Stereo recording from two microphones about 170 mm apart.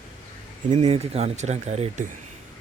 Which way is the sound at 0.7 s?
35° right (ahead or behind).